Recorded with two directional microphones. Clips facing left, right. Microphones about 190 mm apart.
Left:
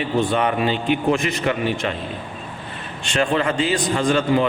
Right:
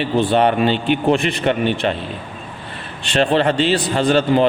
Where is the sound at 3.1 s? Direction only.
30° right (ahead or behind).